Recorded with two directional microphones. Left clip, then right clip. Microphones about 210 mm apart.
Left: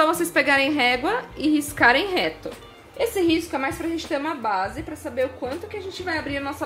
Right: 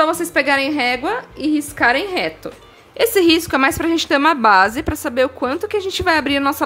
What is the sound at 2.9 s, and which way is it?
A woman's voice, 40° right (ahead or behind).